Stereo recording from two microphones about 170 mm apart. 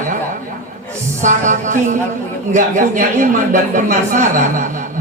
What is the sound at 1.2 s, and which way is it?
A man's voice, 45° right (ahead or behind).